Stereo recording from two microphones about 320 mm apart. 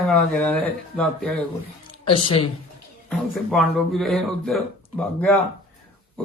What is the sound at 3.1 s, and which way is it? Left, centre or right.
A man's voice, centre.